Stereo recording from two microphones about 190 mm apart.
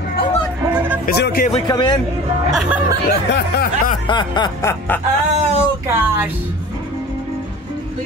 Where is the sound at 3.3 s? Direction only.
55° left (ahead or behind).